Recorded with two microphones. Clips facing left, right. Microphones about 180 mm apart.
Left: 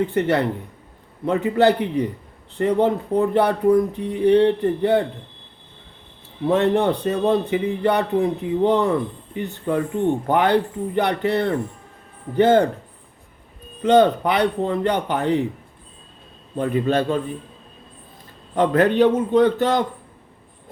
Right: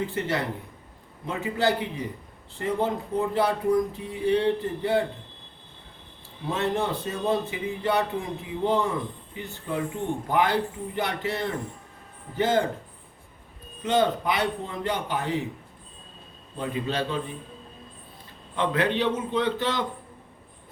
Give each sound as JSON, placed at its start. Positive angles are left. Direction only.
{"t": 0.0, "sound": "speech", "side_deg": 65}
{"t": 6.5, "sound": "speech", "side_deg": 60}
{"t": 13.8, "sound": "speech", "side_deg": 65}
{"t": 16.6, "sound": "a man's voice", "side_deg": 55}
{"t": 18.5, "sound": "a man's voice", "side_deg": 45}